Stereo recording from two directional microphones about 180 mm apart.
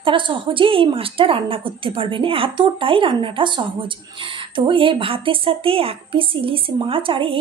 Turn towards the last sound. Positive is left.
turn(degrees=-30)  # may be behind; listen again after turning